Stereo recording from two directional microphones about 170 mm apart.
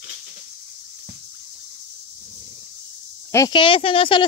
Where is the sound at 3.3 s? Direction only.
25° left (ahead or behind).